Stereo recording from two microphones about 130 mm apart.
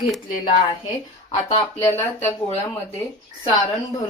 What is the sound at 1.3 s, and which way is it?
Speech, 50° left (ahead or behind).